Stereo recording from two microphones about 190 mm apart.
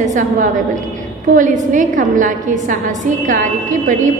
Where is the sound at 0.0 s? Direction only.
40° right (ahead or behind).